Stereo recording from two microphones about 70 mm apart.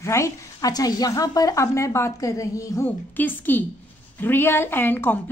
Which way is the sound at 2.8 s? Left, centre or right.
Left.